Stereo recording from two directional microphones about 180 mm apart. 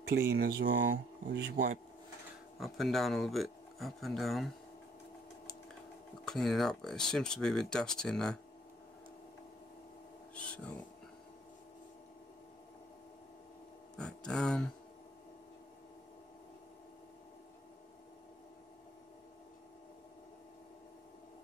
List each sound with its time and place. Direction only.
0.3 s speech: 65° right (ahead or behind)
2.6 s speech: centre (ahead or behind)
6.2 s speech: centre (ahead or behind)
10.3 s a sound: 5° left (ahead or behind)
13.9 s speech: 5° left (ahead or behind)